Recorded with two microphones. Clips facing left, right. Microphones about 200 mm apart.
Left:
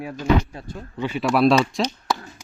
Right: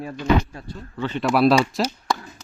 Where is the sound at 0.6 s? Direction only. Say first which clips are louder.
Left 1 dB; 30° left (ahead or behind).